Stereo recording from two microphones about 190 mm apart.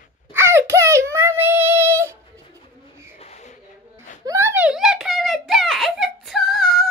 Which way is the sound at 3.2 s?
35° left (ahead or behind).